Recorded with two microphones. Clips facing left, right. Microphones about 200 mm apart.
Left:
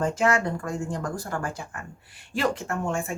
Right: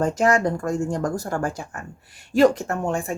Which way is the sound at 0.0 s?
40° right (ahead or behind).